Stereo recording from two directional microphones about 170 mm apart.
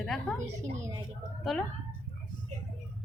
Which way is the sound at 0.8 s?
20° right (ahead or behind).